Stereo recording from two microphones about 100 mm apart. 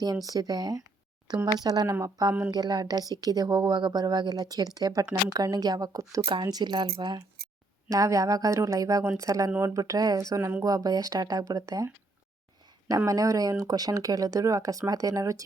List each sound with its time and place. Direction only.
0.3 s a woman's voice: 40° right (ahead or behind)
7.9 s a woman's voice: 35° right (ahead or behind)
13.1 s a woman's voice: 35° right (ahead or behind)